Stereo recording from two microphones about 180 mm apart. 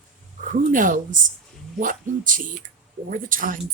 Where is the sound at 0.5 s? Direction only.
50° right (ahead or behind).